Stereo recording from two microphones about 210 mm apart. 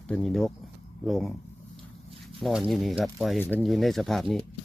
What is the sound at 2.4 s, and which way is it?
Speech, centre (ahead or behind).